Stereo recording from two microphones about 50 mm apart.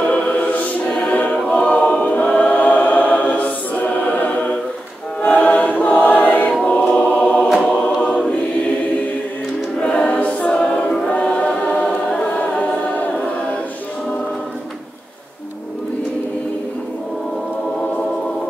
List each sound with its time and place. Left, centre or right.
0.1 s music: left
1.5 s choir: left
6.6 s choir: left
9.8 s choir: left